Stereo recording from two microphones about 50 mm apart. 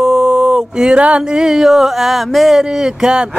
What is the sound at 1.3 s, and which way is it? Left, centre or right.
Speech, centre.